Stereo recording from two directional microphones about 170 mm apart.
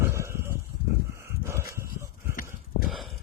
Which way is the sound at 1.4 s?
15° right (ahead or behind).